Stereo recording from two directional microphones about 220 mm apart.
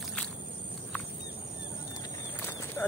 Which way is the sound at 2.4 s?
10° left (ahead or behind).